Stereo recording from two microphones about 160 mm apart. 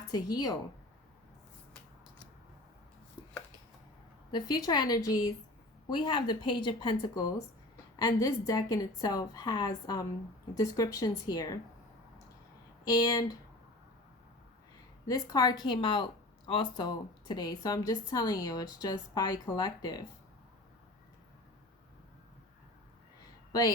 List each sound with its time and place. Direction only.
0.1 s a woman's voice: 25° left (ahead or behind)
4.3 s a woman's voice: 25° left (ahead or behind)
12.8 s a woman's voice: 25° left (ahead or behind)
15.0 s a woman's voice: 25° left (ahead or behind)
23.5 s speech: 25° left (ahead or behind)